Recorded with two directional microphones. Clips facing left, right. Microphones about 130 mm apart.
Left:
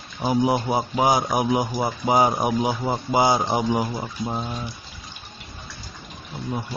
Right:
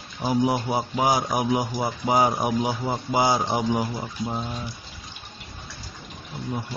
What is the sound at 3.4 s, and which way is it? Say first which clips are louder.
Speech: left 2 dB; 30° left (ahead or behind).